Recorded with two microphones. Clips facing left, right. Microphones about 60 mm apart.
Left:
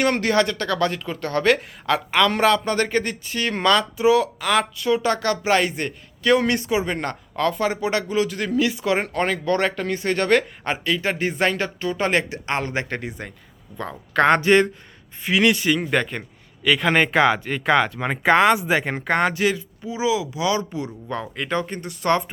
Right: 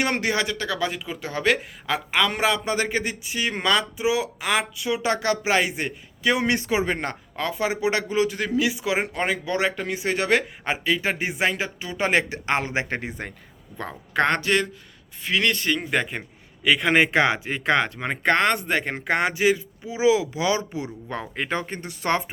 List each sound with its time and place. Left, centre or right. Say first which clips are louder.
0.0 s speech: left 4 dB; centre
5.0 s speech: left 2 dB; right
6.6 s a man's voice: left 1 dB; right; by 11.9 s centre
11.9 s a man's voice: right 1 dB; centre
14.4 s a man's voice: left 6 dB; left
15.2 s speech: left 4 dB; centre
19.3 s a man's voice: right 1 dB; centre